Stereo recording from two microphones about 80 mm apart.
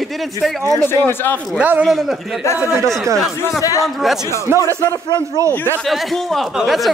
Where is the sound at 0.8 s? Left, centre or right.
Left.